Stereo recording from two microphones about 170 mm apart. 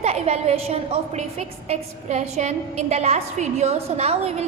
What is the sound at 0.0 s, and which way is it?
A woman's voice, 35° right (ahead or behind).